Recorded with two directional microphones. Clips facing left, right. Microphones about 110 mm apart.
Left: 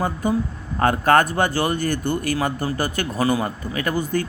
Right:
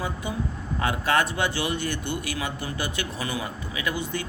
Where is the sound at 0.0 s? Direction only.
45° left (ahead or behind).